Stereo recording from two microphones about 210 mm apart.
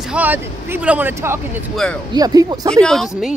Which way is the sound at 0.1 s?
10° right (ahead or behind).